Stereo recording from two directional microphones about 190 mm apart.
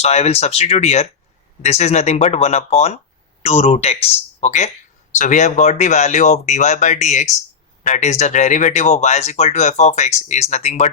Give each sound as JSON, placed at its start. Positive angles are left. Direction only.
{"t": 0.0, "sound": "speech", "side_deg": 35}